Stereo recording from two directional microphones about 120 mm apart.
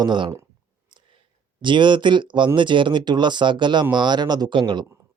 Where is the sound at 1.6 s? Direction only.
40° right (ahead or behind).